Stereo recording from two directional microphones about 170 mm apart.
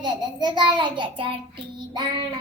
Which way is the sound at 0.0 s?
25° right (ahead or behind).